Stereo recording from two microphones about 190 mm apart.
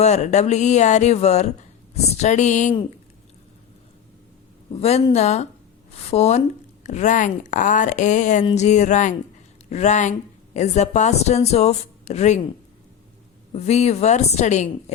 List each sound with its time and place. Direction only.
0.0 s speech: 35° left (ahead or behind)
4.7 s speech: 35° left (ahead or behind)
13.5 s speech: 35° left (ahead or behind)